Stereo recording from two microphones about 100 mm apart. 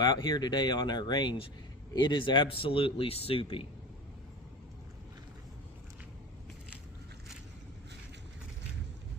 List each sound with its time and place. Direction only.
0.0 s speech: 40° left (ahead or behind); by 3.7 s 65° left (ahead or behind)